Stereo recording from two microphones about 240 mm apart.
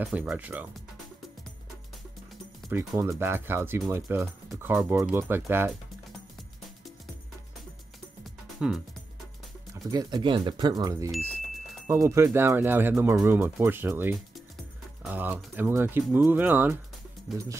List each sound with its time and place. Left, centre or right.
0.0 s speech: centre
2.7 s speech: centre
8.5 s speech: centre
9.8 s speech: centre